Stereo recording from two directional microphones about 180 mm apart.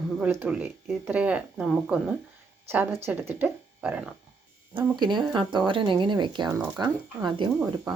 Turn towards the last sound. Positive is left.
turn(degrees=-20)  # may be behind; listen again after turning